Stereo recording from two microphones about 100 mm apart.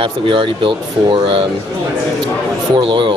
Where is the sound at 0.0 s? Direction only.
60° right (ahead or behind).